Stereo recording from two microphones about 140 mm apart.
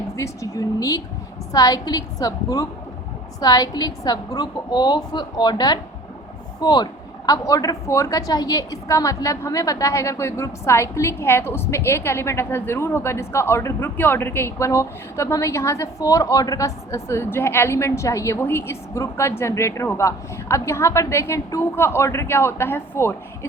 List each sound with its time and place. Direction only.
0.2 s a woman's voice: 25° left (ahead or behind)